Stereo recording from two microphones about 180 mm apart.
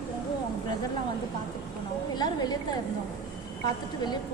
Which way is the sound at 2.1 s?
25° left (ahead or behind).